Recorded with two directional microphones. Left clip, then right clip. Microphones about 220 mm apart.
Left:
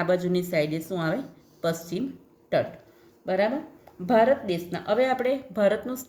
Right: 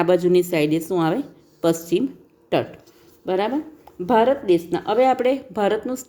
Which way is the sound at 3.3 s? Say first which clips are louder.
Right 3 dB; 35° right (ahead or behind).